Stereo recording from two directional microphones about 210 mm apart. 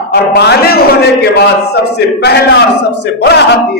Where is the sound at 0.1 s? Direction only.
50° left (ahead or behind).